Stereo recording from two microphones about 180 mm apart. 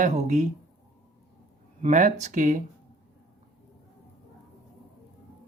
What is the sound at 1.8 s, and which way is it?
Speech, 40° right (ahead or behind).